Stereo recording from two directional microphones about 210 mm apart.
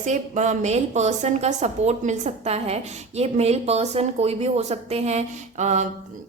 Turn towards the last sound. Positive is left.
turn(degrees=-35)  # may be behind; listen again after turning